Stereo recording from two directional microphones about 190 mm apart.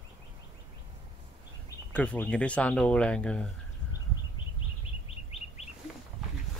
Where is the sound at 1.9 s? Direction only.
5° left (ahead or behind).